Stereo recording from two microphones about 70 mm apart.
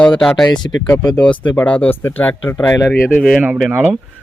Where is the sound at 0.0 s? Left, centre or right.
Centre.